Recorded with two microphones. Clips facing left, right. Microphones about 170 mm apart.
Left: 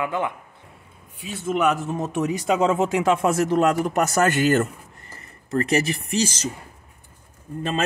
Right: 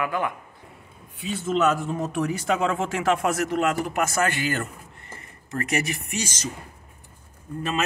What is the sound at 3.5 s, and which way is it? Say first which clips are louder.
Speech: left 5 dB; 35° left (ahead or behind).